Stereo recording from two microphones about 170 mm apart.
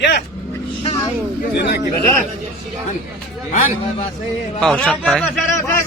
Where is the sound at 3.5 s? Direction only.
55° left (ahead or behind).